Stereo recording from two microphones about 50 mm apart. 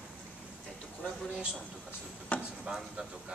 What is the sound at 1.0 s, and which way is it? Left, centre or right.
Speech, centre.